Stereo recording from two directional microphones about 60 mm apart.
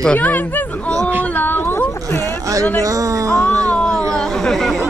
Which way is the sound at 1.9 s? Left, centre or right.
Left.